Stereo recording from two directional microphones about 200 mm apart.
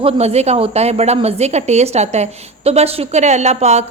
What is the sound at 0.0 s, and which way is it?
A woman's voice, 30° right (ahead or behind).